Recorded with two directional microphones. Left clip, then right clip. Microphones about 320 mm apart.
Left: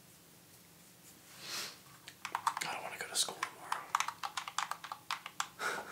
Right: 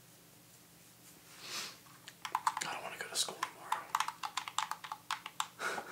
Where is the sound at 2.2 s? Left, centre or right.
Centre.